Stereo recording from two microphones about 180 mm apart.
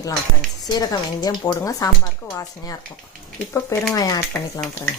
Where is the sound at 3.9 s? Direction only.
20° left (ahead or behind).